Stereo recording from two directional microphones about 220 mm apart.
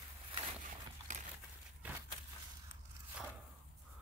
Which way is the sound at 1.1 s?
35° right (ahead or behind).